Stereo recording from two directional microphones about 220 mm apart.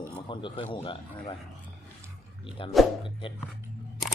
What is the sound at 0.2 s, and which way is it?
A man's voice, 20° left (ahead or behind).